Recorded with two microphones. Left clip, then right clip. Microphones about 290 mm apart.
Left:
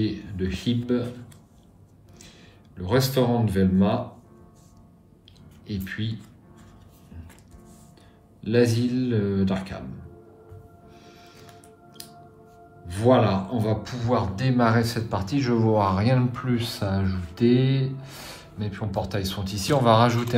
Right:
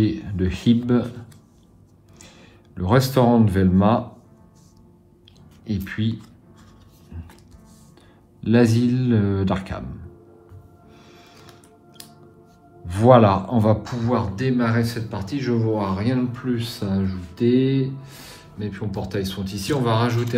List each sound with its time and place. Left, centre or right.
0.0 s speech: centre
2.2 s speech: centre
5.7 s speech: centre
8.4 s speech: centre
11.1 s music: centre
12.8 s speech: centre
13.8 s speech: centre